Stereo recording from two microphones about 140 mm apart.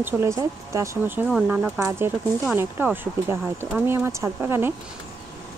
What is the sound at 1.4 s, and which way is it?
Speech, 5° right (ahead or behind).